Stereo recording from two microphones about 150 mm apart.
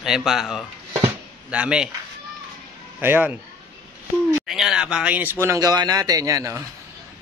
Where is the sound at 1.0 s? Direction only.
10° right (ahead or behind).